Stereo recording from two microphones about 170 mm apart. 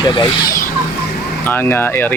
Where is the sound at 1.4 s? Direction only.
15° left (ahead or behind).